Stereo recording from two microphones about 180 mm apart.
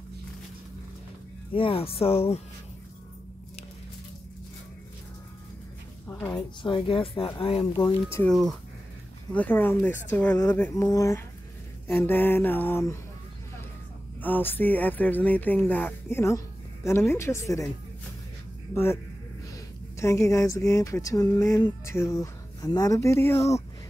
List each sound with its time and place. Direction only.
1.5 s speech: 30° left (ahead or behind)
6.0 s a sound: 10° left (ahead or behind)
6.6 s speech: 30° left (ahead or behind)
8.3 s speech: centre (ahead or behind)
14.2 s speech: 10° left (ahead or behind)
19.5 s speech: 15° left (ahead or behind)